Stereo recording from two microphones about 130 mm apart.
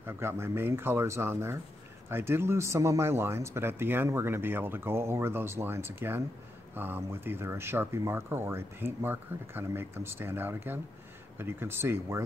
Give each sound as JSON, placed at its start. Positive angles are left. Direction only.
{"t": 0.0, "sound": "speech", "side_deg": -20}